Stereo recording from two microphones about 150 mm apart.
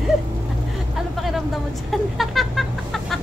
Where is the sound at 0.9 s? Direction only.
Centre (ahead or behind).